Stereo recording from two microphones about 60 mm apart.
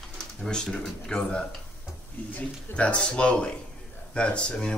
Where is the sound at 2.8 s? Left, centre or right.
Centre.